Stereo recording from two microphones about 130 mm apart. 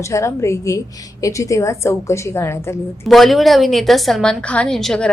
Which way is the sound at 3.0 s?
Centre (ahead or behind).